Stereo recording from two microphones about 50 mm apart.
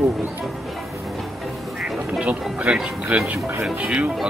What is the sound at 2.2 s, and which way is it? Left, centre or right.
Speech, right.